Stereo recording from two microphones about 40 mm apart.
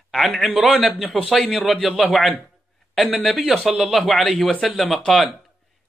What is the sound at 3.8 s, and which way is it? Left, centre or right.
A man's voice, centre.